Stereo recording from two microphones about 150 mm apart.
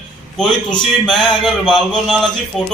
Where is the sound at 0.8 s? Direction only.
Centre (ahead or behind).